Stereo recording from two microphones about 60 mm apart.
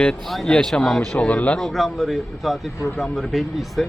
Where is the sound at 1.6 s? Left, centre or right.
Centre.